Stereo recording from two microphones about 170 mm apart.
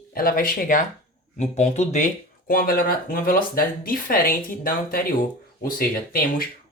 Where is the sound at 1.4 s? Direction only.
40° left (ahead or behind).